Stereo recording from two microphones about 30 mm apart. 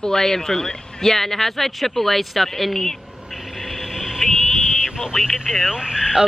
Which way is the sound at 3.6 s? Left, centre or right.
Centre.